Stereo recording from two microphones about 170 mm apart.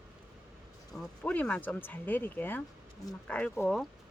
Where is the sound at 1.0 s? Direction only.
5° left (ahead or behind).